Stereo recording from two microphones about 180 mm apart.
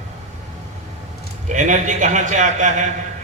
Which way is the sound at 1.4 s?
45° right (ahead or behind).